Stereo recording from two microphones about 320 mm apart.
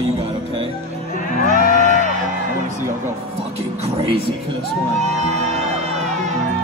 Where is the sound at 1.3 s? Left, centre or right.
Left.